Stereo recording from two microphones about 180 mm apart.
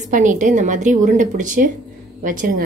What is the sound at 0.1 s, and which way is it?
A woman's voice, 45° right (ahead or behind).